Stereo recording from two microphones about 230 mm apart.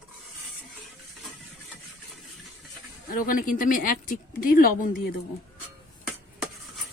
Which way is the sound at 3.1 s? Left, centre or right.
Left.